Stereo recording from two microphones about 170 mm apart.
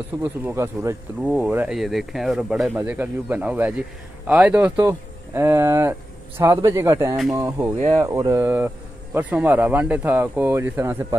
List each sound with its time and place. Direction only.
0.2 s speech: 15° right (ahead or behind)
1.2 s speech: 5° right (ahead or behind)